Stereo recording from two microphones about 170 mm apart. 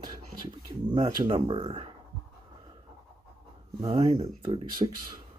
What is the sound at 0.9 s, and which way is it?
Speech, 25° right (ahead or behind).